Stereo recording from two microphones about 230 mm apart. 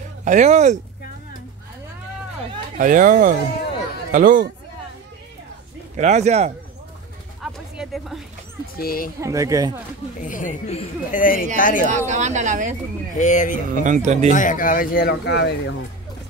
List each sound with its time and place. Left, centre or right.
0.2 s speech: right
2.8 s speech: right
5.9 s speech: right
7.7 s speech: centre
8.7 s speech: left
9.2 s speech: centre
10.2 s speech: left
12.1 s speech: right
13.2 s speech: left
13.7 s speech: right
14.3 s speech: left